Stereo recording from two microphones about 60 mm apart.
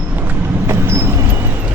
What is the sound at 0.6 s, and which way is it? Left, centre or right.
Vehicle, right.